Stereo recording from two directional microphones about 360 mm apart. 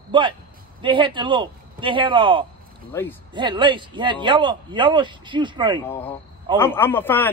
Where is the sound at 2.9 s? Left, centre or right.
Centre.